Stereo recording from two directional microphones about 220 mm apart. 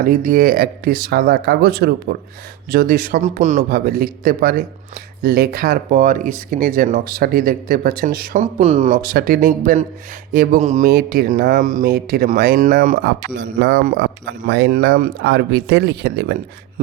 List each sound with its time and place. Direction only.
0.0 s speech: 40° right (ahead or behind)
13.1 s speech: 50° right (ahead or behind)